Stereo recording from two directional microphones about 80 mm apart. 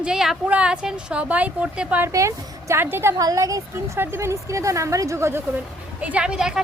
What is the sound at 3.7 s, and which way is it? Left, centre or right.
A woman's voice, right.